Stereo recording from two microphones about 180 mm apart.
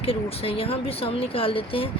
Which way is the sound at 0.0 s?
30° left (ahead or behind).